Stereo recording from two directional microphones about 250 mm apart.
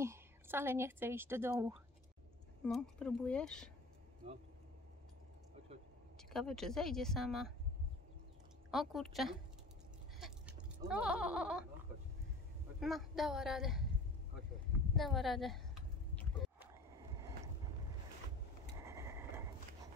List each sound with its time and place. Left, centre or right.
0.0 s a woman's voice: centre
2.6 s speech: centre
4.2 s speech: right
6.3 s speech: centre
8.6 s speech: centre
10.1 s a sound: centre
10.9 s speech: centre
12.8 s speech: centre
15.0 s a sound: centre
18.9 s vehicle: centre